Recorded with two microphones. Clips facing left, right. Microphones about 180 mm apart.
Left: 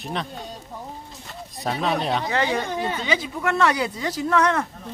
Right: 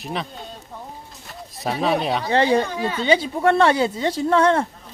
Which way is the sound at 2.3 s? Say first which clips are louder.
Right 5 dB; 30° right (ahead or behind).